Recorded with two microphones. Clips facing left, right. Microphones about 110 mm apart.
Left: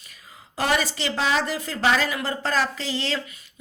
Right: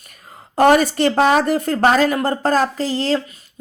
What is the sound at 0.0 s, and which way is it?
A woman's voice, 50° right (ahead or behind).